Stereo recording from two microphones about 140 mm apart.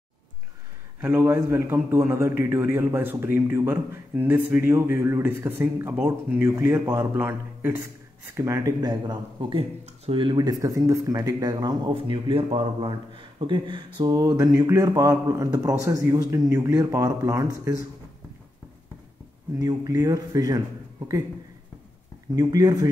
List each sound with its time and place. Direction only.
1.0 s a man's voice: 15° right (ahead or behind)
6.4 s speech: 20° right (ahead or behind)
19.6 s speech: 30° right (ahead or behind)
22.3 s speech: 25° right (ahead or behind)